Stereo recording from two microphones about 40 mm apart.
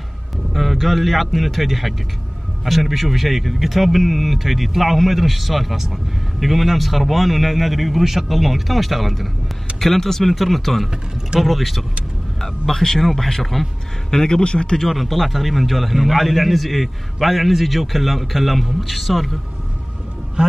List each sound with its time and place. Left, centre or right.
0.5 s a man's voice: centre
14.1 s speech: centre
14.8 s a man's voice: centre
20.4 s speech: right